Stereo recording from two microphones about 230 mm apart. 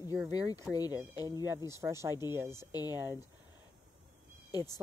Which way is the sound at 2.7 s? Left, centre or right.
Centre.